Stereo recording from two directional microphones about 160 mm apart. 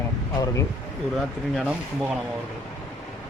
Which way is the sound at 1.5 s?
5° right (ahead or behind).